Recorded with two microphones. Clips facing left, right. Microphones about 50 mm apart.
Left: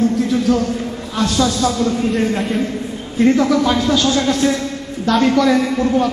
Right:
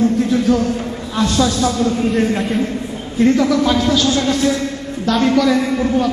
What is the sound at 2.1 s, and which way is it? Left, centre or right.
Speech, centre.